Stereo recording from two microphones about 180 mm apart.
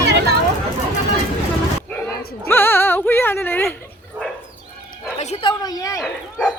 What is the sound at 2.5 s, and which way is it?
Music, 10° left (ahead or behind).